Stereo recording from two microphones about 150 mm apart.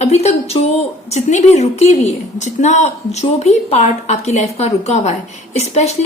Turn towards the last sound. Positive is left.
turn(degrees=45)  # may be behind; listen again after turning